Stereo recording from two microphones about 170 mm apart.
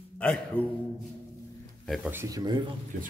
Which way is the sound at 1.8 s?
Centre (ahead or behind).